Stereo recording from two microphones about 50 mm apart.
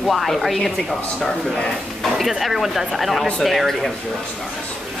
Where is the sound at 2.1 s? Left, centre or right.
Centre.